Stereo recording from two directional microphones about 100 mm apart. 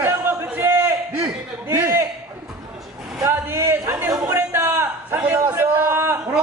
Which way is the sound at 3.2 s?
25° right (ahead or behind).